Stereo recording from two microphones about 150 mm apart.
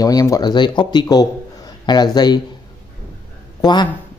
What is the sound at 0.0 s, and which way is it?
Speech, 25° left (ahead or behind).